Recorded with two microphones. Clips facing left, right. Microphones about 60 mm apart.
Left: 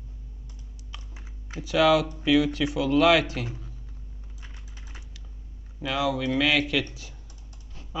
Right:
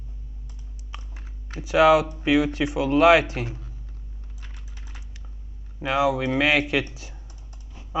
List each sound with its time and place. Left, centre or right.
0.9 s computer keyboard: right
1.6 s speech: right
5.8 s speech: right